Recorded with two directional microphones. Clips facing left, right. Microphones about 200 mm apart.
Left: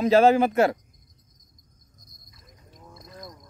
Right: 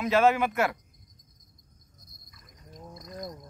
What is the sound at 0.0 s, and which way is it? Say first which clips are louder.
Speech: left 5 dB; 35° left (ahead or behind).